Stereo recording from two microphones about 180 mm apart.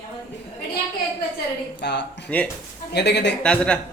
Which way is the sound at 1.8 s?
70° left (ahead or behind).